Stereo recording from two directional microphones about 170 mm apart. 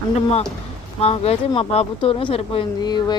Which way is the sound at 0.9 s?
35° left (ahead or behind).